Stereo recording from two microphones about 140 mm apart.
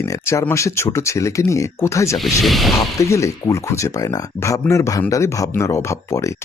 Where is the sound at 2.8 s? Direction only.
20° left (ahead or behind).